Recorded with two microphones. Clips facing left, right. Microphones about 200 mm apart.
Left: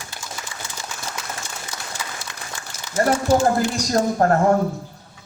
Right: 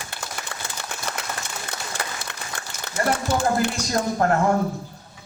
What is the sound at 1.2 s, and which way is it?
Applause, 60° right (ahead or behind).